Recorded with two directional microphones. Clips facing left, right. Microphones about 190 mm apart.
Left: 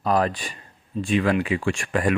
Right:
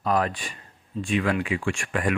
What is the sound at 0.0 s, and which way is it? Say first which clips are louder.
Speech: left 3 dB; 35° left (ahead or behind).